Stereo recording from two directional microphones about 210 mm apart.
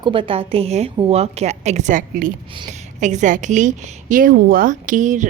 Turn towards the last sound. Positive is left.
turn(degrees=-35)  # may be behind; listen again after turning